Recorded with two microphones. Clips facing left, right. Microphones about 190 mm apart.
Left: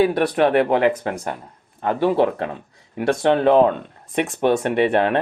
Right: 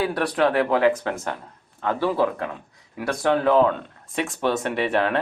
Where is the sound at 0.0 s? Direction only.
25° left (ahead or behind).